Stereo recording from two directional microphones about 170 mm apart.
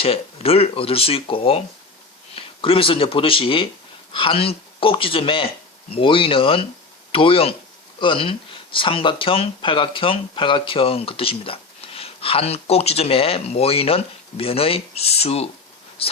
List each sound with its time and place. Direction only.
0.0 s speech: 35° left (ahead or behind)